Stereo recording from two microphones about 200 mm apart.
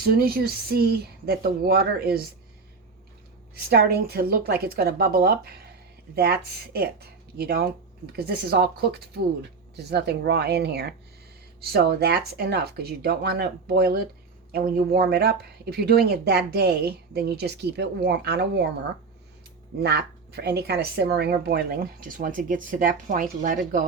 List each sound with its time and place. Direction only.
0.0 s speech: 50° right (ahead or behind)
3.5 s speech: 50° right (ahead or behind)
19.8 s speech: 55° right (ahead or behind)